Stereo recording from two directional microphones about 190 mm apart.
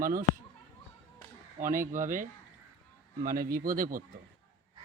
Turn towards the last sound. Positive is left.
turn(degrees=-45)  # may be behind; listen again after turning